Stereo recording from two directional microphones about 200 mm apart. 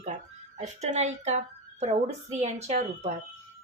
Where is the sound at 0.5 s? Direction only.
35° right (ahead or behind).